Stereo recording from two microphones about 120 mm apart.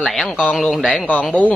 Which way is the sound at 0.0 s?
Centre (ahead or behind).